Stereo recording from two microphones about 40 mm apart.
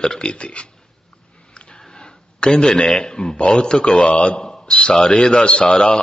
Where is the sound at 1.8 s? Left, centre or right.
Left.